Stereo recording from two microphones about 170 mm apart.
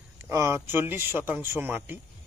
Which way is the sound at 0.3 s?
20° right (ahead or behind).